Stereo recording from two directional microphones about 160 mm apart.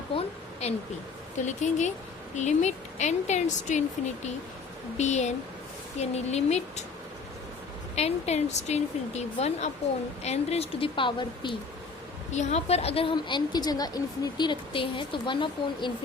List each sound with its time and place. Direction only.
0.6 s a woman's voice: 40° left (ahead or behind)
4.9 s a woman's voice: 45° left (ahead or behind)
7.9 s a woman's voice: 45° left (ahead or behind)
12.3 s a woman's voice: 45° left (ahead or behind)